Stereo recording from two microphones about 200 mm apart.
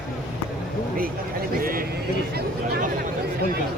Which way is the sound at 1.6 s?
45° right (ahead or behind).